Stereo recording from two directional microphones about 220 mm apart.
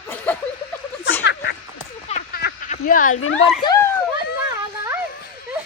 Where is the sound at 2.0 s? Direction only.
30° left (ahead or behind).